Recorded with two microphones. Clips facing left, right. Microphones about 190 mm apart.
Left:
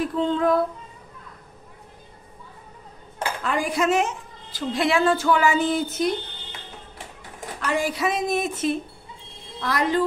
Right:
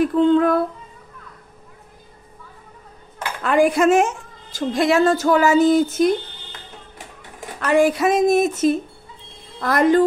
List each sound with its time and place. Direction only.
0.0 s a sound: 55° right (ahead or behind)
3.4 s a woman's voice: 55° right (ahead or behind)
7.6 s a woman's voice: 55° right (ahead or behind)